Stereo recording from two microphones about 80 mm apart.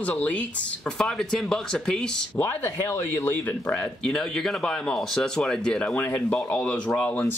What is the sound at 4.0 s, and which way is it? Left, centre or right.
Speech, centre.